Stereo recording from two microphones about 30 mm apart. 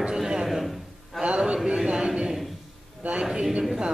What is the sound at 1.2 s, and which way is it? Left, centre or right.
Speech, right.